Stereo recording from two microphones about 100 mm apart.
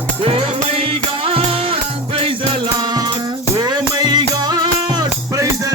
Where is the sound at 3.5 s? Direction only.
45° right (ahead or behind).